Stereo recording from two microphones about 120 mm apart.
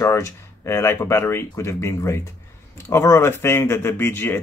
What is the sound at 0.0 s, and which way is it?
Speech, 25° left (ahead or behind).